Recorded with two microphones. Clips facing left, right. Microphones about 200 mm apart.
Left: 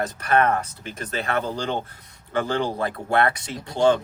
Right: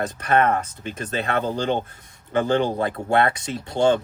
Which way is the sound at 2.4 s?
20° right (ahead or behind).